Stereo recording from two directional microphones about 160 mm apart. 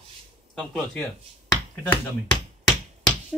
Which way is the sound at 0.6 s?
10° left (ahead or behind).